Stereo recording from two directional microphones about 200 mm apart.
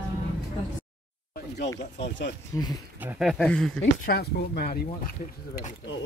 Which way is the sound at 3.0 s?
5° right (ahead or behind).